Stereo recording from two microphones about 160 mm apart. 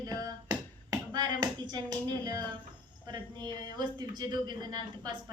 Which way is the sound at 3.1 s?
25° right (ahead or behind).